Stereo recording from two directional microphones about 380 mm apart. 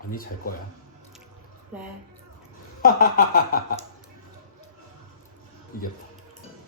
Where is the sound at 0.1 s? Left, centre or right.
Left.